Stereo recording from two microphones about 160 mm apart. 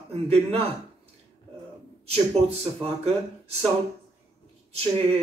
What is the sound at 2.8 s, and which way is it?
Speech, 40° right (ahead or behind).